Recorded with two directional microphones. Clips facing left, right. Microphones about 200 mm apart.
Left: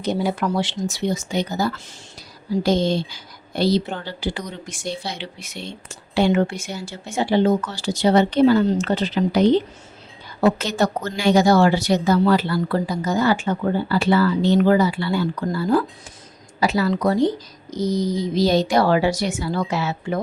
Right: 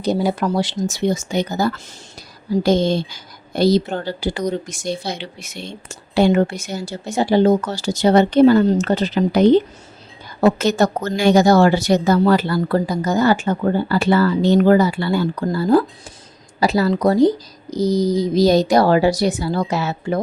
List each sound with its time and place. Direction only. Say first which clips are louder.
0.0 s a woman's voice: right 3 dB; 35° right (ahead or behind)